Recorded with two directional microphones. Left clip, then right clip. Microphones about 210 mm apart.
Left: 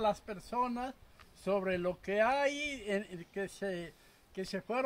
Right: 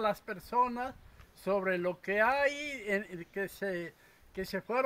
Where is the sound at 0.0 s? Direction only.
20° right (ahead or behind).